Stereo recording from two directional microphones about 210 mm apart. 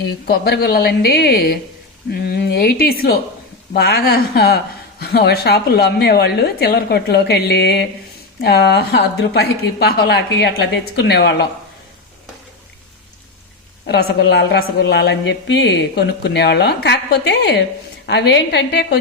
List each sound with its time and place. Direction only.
0.3 s a woman's voice: 50° left (ahead or behind)
13.8 s a woman's voice: 50° left (ahead or behind)